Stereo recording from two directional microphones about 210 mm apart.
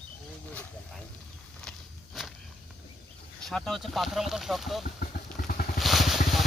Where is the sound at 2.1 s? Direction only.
Centre (ahead or behind).